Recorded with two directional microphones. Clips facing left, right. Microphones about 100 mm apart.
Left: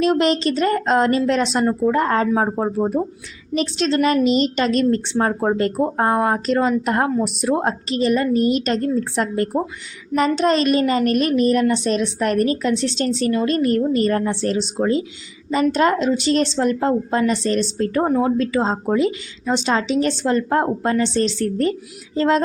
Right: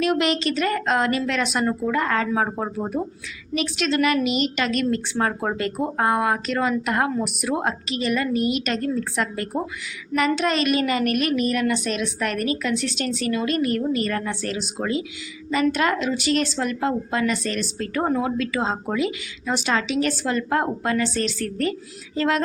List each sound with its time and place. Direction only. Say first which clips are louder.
0.0 s a woman's voice: left 4 dB; 30° left (ahead or behind)
2.3 s a woman's voice: left 4 dB; 20° left (ahead or behind)
2.9 s a woman's voice: left 5 dB; 35° left (ahead or behind)